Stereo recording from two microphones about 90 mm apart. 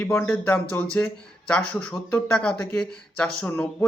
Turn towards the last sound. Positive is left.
turn(degrees=15)  # may be behind; listen again after turning